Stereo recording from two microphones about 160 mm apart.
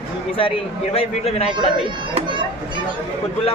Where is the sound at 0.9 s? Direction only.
40° left (ahead or behind).